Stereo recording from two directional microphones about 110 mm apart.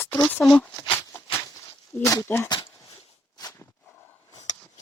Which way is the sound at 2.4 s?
40° left (ahead or behind).